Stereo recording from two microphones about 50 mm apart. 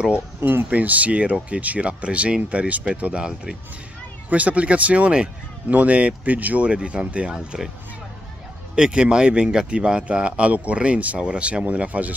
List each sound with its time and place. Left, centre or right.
0.4 s speech: right
0.7 s speech: right; by 7.7 s centre
8.7 s speech: centre